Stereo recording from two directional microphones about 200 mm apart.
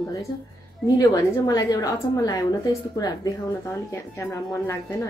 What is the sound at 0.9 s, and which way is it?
A woman's voice, 20° left (ahead or behind).